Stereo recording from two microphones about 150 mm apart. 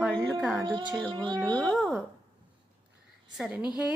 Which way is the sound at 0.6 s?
30° right (ahead or behind).